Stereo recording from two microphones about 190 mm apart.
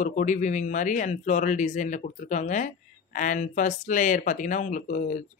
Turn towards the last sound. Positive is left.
turn(degrees=40)  # may be behind; listen again after turning